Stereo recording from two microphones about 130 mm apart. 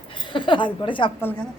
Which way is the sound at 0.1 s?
40° left (ahead or behind).